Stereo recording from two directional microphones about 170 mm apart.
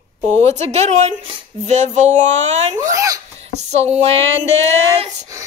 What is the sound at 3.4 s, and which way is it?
Speech, 40° right (ahead or behind).